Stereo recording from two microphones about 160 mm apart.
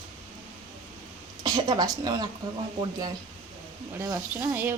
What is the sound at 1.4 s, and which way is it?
Speech, 25° right (ahead or behind).